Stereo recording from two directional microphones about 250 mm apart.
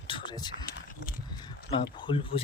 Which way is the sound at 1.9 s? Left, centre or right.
Centre.